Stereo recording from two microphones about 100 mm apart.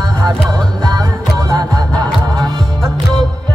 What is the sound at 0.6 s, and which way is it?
Music, 45° right (ahead or behind).